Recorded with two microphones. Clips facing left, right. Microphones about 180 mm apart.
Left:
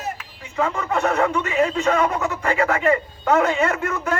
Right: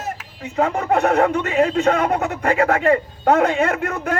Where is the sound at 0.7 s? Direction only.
50° right (ahead or behind).